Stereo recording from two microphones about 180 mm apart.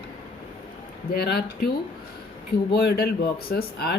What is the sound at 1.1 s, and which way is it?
Speech, 60° left (ahead or behind).